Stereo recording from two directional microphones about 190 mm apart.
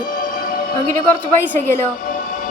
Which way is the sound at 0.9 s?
10° left (ahead or behind).